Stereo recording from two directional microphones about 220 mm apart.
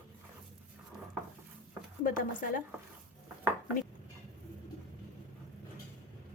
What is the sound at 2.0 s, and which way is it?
Speech, 40° left (ahead or behind).